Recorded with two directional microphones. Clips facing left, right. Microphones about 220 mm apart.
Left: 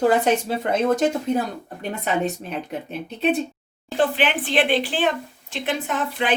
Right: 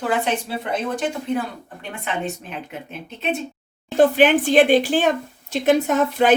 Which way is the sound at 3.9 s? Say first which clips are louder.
Right 7 dB; 45° right (ahead or behind).